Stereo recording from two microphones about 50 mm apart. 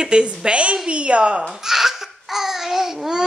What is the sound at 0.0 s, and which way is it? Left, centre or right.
A woman's voice, centre.